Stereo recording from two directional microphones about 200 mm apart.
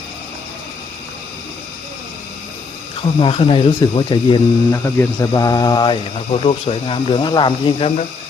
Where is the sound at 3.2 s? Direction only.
25° left (ahead or behind).